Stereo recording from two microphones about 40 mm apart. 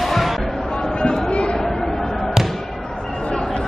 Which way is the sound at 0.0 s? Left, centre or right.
Centre.